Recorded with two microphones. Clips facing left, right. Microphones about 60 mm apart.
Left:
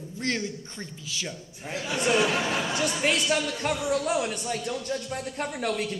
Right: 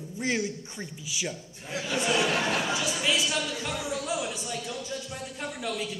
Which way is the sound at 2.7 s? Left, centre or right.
Left.